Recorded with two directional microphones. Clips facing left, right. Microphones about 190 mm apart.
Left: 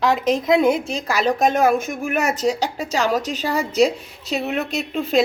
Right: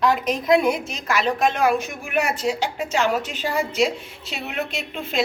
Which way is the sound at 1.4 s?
45° left (ahead or behind).